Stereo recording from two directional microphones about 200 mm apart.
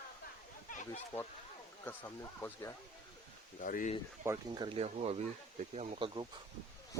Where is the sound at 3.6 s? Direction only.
40° left (ahead or behind).